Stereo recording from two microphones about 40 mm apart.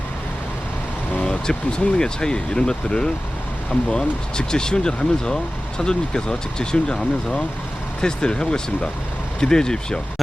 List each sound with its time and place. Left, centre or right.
1.2 s speech: left